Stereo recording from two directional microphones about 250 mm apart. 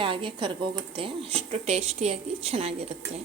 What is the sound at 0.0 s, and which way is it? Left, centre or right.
Speech, centre.